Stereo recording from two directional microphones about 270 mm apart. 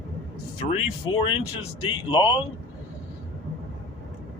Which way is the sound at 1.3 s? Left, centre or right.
Left.